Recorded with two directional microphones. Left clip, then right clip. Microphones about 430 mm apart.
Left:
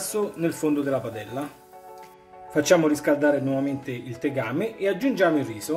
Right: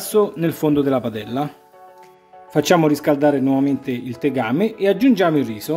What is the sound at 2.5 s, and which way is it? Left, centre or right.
Speech, centre.